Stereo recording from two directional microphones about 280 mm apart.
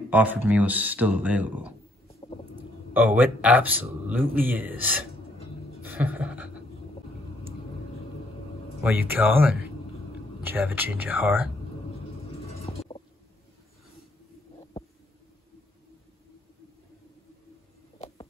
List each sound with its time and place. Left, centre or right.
0.1 s speech: centre
2.0 s stomach rumble: left
2.9 s speech: centre
5.8 s a sound: centre
8.8 s speech: centre
12.4 s stomach rumble: left
17.9 s a sound: left